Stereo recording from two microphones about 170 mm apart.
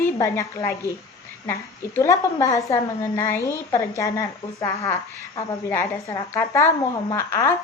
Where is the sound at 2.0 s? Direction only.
20° left (ahead or behind).